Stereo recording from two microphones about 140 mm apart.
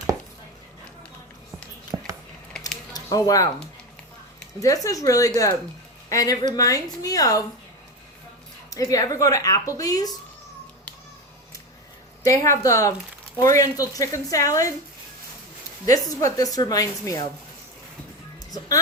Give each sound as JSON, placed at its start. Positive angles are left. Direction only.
{"t": 1.9, "sound": "a sound", "side_deg": -15}
{"t": 2.5, "sound": "a sound", "side_deg": 5}
{"t": 2.9, "sound": "speech", "side_deg": 25}
{"t": 4.6, "sound": "a woman's voice", "side_deg": 25}
{"t": 8.7, "sound": "a woman's voice", "side_deg": 25}
{"t": 12.2, "sound": "a woman's voice", "side_deg": 25}
{"t": 15.9, "sound": "a woman's voice", "side_deg": 25}